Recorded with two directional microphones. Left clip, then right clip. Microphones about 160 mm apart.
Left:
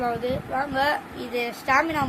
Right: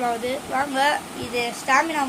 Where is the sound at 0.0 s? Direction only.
15° left (ahead or behind).